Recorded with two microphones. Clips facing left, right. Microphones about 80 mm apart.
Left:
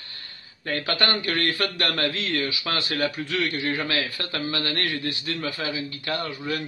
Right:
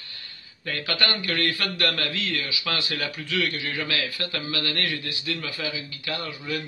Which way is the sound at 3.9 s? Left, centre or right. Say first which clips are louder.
Left 1 dB; left.